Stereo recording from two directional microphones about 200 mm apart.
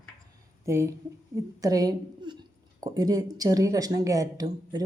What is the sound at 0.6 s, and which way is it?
A woman's voice, 15° right (ahead or behind).